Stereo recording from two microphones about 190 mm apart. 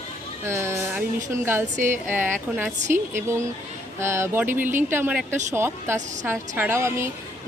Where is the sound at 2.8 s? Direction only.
40° right (ahead or behind).